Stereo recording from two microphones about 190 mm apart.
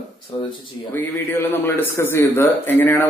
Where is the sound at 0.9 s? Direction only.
10° left (ahead or behind).